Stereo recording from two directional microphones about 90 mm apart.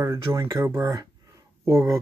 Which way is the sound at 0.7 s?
45° right (ahead or behind).